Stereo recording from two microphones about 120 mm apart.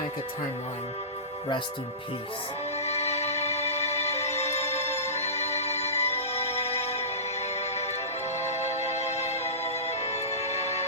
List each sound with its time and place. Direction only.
2.7 s music: 65° left (ahead or behind)